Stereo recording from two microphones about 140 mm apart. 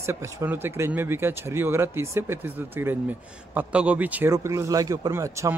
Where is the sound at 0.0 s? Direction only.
20° right (ahead or behind).